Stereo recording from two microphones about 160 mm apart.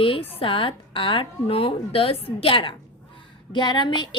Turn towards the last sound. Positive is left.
turn(degrees=30)  # may be behind; listen again after turning